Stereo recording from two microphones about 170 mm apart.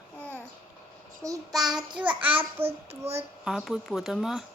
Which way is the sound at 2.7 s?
40° right (ahead or behind).